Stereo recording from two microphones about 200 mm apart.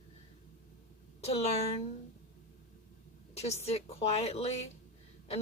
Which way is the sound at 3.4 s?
30° left (ahead or behind).